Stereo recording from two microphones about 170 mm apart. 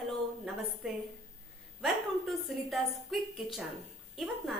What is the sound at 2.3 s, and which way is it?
A woman's voice, centre (ahead or behind).